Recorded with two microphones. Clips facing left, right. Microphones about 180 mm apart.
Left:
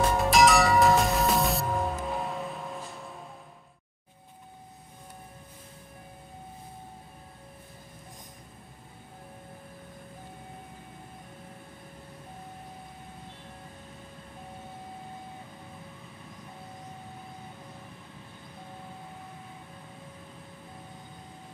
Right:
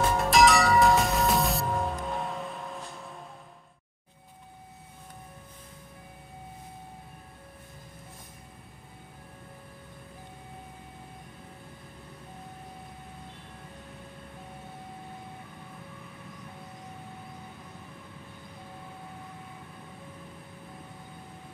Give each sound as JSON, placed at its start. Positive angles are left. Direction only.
{"t": 0.1, "sound": "music", "side_deg": 0}